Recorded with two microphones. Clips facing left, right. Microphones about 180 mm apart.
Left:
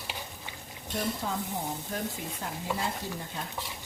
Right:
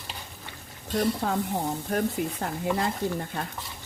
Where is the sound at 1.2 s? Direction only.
70° right (ahead or behind).